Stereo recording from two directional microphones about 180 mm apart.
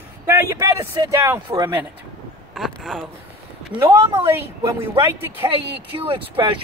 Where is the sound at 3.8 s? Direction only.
15° right (ahead or behind).